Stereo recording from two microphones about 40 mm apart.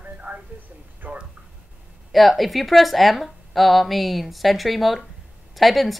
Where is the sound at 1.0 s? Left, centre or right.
Right.